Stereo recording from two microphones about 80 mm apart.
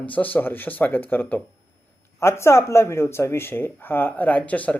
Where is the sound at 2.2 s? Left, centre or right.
Left; by 4.8 s centre.